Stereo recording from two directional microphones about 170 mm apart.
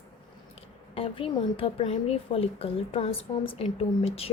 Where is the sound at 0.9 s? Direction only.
30° left (ahead or behind).